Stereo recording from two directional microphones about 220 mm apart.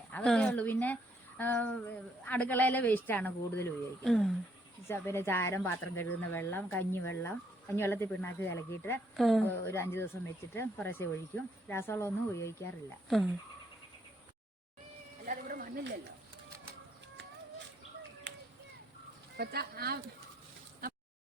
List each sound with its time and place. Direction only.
0.1 s speech: 5° left (ahead or behind)
15.3 s a sound: 40° right (ahead or behind)
19.4 s speech: 45° right (ahead or behind)